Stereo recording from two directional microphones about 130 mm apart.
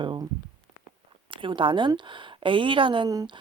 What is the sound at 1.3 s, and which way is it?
A woman's voice, 40° right (ahead or behind).